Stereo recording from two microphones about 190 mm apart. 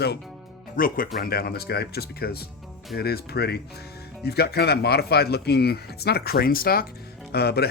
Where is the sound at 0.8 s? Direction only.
45° left (ahead or behind).